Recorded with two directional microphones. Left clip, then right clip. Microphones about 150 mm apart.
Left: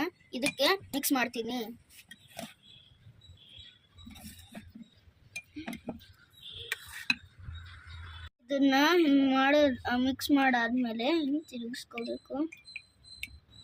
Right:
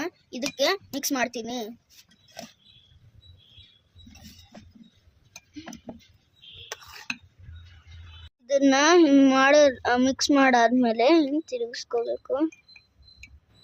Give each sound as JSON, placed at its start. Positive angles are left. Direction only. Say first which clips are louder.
{"t": 0.0, "sound": "a sound", "louder": "right 2 dB", "side_deg": -90}
{"t": 0.5, "sound": "speech", "louder": "right 4 dB", "side_deg": -90}
{"t": 8.4, "sound": "speech", "louder": "right 6 dB", "side_deg": -90}